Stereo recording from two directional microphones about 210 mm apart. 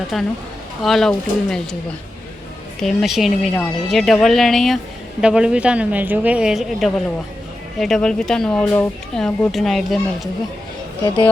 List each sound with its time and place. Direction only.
0.1 s speech: centre (ahead or behind)
2.8 s speech: centre (ahead or behind)